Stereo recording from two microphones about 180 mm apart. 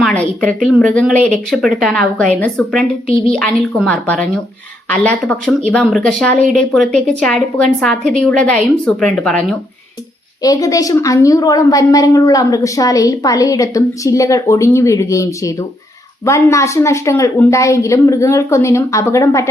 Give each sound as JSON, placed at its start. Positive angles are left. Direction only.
{"t": 0.0, "sound": "speech", "side_deg": 5}
{"t": 10.4, "sound": "a woman's voice", "side_deg": 20}